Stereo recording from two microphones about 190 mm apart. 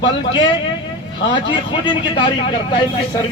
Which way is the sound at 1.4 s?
25° left (ahead or behind).